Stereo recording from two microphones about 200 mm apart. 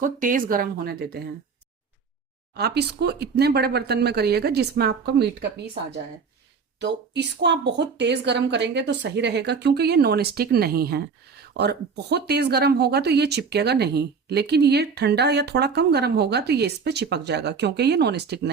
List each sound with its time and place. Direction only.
0.0 s speech: 40° right (ahead or behind)
2.6 s speech: 55° right (ahead or behind)
6.7 s speech: 60° right (ahead or behind)